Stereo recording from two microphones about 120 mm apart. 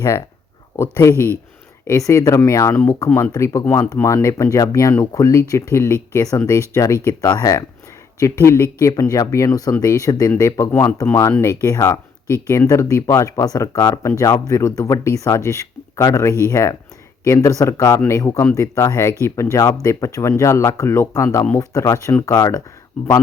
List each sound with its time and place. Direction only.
1.9 s speech: 25° left (ahead or behind)